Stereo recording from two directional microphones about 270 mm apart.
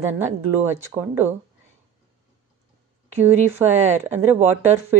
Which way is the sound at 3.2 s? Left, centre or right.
Centre.